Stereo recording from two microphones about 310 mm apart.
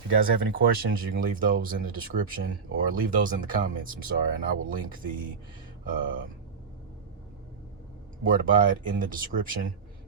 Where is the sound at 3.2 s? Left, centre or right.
Right.